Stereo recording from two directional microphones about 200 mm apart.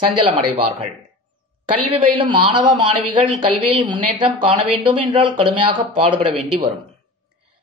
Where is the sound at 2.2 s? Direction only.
25° right (ahead or behind).